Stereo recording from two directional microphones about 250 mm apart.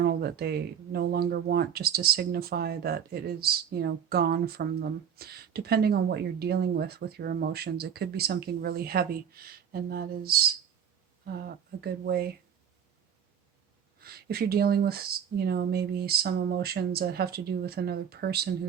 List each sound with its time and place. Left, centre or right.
0.0 s speech: right
14.0 s speech: right